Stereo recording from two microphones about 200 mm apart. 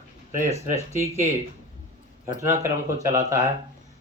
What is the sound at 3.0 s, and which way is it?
Speech, 35° right (ahead or behind).